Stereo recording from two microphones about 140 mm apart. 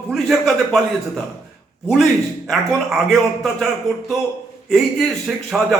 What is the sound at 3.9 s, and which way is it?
Speech, 30° right (ahead or behind).